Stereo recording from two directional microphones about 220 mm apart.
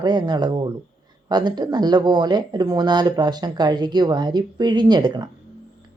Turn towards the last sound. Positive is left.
turn(degrees=-20)  # may be behind; listen again after turning